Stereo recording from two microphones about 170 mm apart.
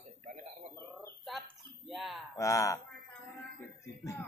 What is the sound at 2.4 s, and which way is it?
Speech, 20° left (ahead or behind).